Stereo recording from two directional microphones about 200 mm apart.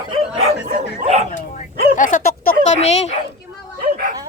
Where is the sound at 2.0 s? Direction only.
40° left (ahead or behind).